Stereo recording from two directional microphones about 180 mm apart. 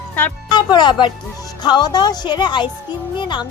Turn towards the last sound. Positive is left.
turn(degrees=25)  # may be behind; listen again after turning